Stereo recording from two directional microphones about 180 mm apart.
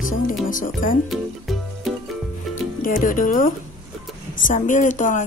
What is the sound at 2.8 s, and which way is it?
Speech, 50° left (ahead or behind).